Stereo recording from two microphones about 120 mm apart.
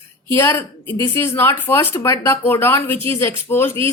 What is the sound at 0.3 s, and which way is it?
Speech, 20° left (ahead or behind).